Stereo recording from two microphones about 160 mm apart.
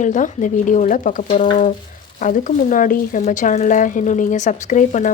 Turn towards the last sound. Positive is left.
turn(degrees=50)  # may be behind; listen again after turning